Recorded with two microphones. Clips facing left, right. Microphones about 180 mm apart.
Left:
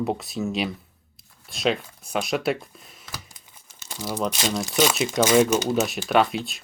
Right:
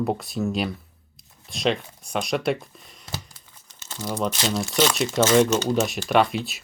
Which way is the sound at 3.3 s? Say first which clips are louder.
Even; 15° left (ahead or behind).